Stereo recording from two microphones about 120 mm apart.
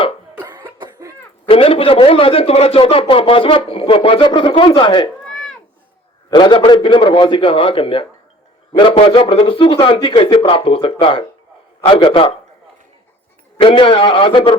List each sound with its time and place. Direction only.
0.4 s cough: 40° right (ahead or behind)
1.5 s a man's voice: 50° left (ahead or behind)
5.2 s a sound: 5° left (ahead or behind)
6.3 s a man's voice: 40° left (ahead or behind)
13.6 s a man's voice: 45° left (ahead or behind)